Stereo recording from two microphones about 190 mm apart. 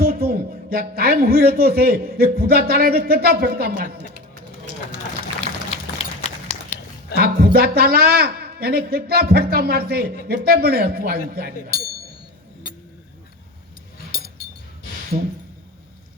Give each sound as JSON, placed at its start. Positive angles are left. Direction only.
{"t": 0.0, "sound": "speech", "side_deg": -55}
{"t": 5.7, "sound": "a sound", "side_deg": 30}
{"t": 7.2, "sound": "a woman's voice", "side_deg": -55}
{"t": 14.1, "sound": "chink", "side_deg": 50}